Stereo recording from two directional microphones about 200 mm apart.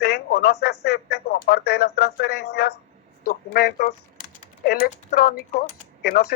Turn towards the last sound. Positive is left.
turn(degrees=50)  # may be behind; listen again after turning